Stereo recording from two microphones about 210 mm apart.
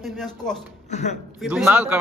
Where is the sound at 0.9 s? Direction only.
35° left (ahead or behind).